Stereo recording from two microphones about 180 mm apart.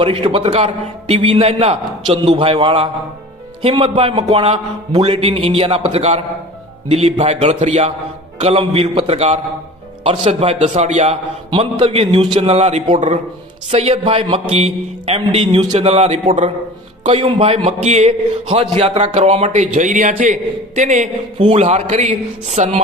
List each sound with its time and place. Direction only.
0.0 s a man's voice: 30° right (ahead or behind)
21.3 s a man's voice: 30° right (ahead or behind)